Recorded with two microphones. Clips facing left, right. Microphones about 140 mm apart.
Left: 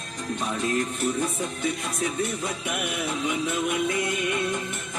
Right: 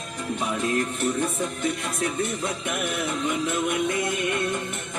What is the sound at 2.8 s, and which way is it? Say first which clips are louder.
Music: right 2 dB; 50° right (ahead or behind).